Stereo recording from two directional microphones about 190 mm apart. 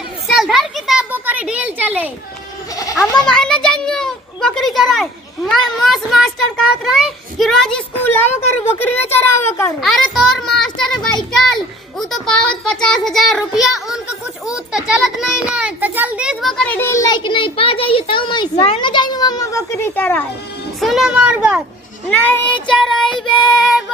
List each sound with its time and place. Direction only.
0.3 s a sound: centre (ahead or behind)
2.7 s goat: 15° left (ahead or behind)
3.2 s a child's voice: 5° left (ahead or behind)
9.8 s a child's voice: centre (ahead or behind)
20.8 s a child's voice: centre (ahead or behind)
22.2 s a child's voice: 10° left (ahead or behind)